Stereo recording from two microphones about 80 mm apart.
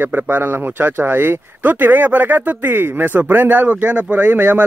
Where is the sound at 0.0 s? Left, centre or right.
Right.